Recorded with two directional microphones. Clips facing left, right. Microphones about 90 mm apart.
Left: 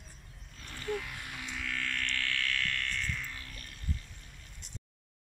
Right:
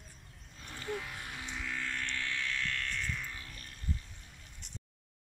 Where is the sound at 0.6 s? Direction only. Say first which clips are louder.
Left 3 dB; 15° right (ahead or behind).